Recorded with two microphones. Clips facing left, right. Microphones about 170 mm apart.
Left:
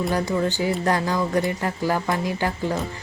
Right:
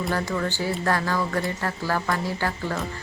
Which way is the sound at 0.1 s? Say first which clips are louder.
Left 3 dB; 15° left (ahead or behind).